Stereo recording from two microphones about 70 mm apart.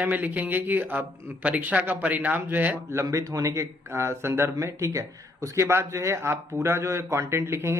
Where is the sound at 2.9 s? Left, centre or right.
Right.